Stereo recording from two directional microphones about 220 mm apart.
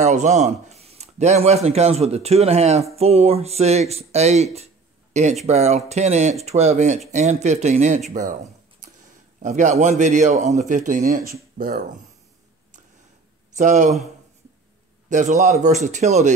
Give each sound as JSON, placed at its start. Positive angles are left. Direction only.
{"t": 0.0, "sound": "a man's voice", "side_deg": -30}
{"t": 9.4, "sound": "a man's voice", "side_deg": -35}
{"t": 13.6, "sound": "a man's voice", "side_deg": -35}
{"t": 15.0, "sound": "a man's voice", "side_deg": -35}